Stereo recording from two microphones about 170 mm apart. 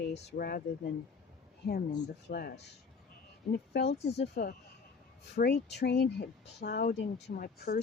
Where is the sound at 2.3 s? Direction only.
65° left (ahead or behind).